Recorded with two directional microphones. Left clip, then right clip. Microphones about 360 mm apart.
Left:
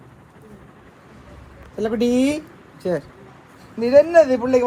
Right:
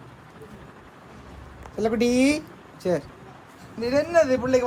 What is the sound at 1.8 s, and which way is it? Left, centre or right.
Speech, centre.